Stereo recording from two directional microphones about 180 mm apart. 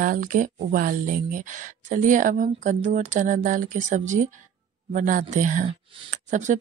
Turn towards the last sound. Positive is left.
turn(degrees=-40)  # may be behind; listen again after turning